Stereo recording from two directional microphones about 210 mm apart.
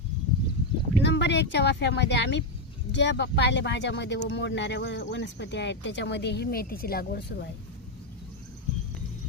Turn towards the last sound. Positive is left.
turn(degrees=45)  # may be behind; listen again after turning